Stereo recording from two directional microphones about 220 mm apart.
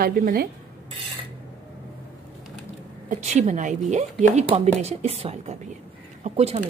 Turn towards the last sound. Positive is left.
turn(degrees=-30)  # may be behind; listen again after turning